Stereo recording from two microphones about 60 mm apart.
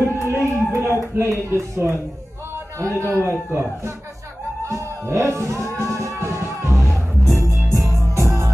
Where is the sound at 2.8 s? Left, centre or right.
Right.